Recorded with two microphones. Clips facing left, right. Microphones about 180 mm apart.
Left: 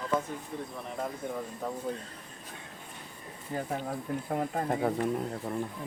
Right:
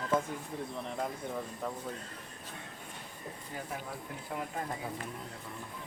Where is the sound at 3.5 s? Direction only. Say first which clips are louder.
Left 9 dB; 40° left (ahead or behind); by 5.5 s 60° left (ahead or behind).